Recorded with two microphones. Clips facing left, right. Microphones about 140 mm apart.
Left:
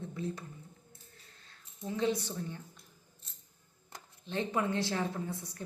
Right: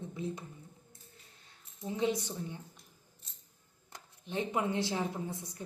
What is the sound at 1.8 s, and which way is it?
Speech, 20° right (ahead or behind).